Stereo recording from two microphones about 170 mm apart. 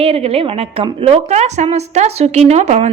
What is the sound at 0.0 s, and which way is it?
A woman's voice, 35° right (ahead or behind).